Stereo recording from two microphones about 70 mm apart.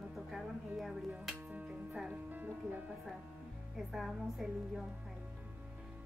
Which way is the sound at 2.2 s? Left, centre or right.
Right.